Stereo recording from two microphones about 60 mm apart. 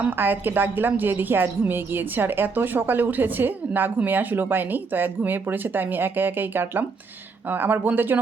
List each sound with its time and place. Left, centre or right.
0.0 s a woman's voice: right